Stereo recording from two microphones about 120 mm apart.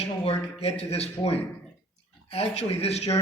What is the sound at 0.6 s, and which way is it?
Speech, 60° left (ahead or behind).